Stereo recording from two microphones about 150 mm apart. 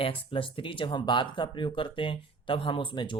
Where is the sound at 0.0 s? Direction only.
35° left (ahead or behind).